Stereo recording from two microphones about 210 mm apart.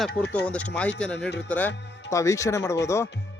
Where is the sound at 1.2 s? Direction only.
55° left (ahead or behind).